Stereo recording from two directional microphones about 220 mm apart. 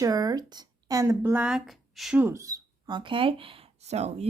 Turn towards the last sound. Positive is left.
turn(degrees=-30)  # may be behind; listen again after turning